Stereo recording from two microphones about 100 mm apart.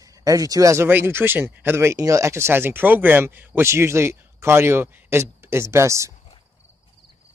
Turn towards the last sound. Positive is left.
turn(degrees=-30)  # may be behind; listen again after turning